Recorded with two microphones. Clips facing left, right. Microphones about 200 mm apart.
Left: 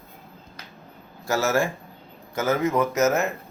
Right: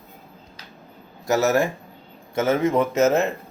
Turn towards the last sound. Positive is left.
turn(degrees=-30)  # may be behind; listen again after turning